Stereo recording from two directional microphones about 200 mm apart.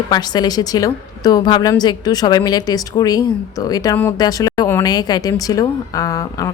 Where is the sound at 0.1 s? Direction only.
20° left (ahead or behind).